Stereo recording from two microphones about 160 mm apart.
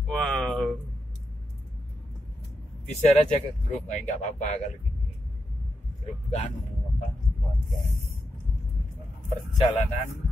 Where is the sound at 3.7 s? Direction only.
45° left (ahead or behind).